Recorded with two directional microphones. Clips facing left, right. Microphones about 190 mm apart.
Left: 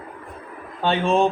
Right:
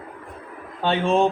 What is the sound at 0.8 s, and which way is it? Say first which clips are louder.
Speech: even; 60° right (ahead or behind).